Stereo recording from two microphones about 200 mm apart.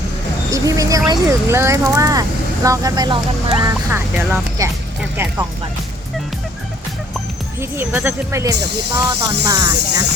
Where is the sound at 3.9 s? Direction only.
10° right (ahead or behind).